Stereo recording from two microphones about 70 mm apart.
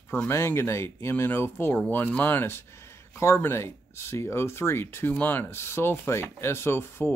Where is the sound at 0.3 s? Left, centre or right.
Left.